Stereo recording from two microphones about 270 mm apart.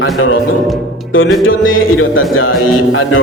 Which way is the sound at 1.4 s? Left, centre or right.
Left.